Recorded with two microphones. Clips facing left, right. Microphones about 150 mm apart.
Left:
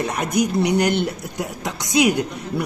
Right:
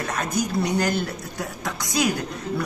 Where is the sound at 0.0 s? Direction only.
15° left (ahead or behind).